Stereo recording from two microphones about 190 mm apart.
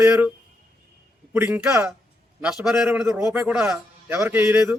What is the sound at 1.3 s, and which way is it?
A man's voice, 10° right (ahead or behind).